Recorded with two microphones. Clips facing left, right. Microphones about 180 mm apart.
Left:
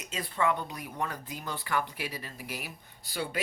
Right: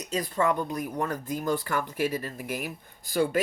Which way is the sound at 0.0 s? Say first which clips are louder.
Right 4 dB; 40° right (ahead or behind).